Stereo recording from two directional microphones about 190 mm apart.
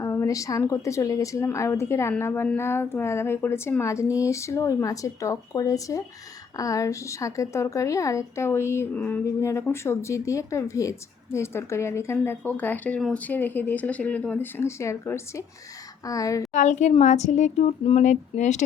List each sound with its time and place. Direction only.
0.0 s speech: 15° left (ahead or behind)
16.5 s a woman's voice: 40° left (ahead or behind)